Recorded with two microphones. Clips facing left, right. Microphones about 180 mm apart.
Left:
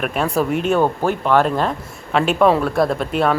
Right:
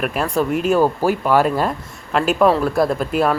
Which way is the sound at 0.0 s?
Centre (ahead or behind).